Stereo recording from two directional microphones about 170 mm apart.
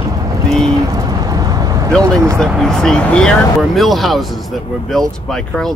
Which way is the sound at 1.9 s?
5° left (ahead or behind).